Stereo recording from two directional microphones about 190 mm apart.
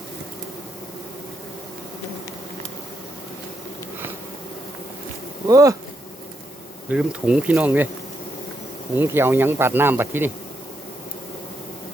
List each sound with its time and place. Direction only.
5.5 s speech: 15° right (ahead or behind)
6.9 s speech: 5° right (ahead or behind)
9.0 s speech: 10° right (ahead or behind)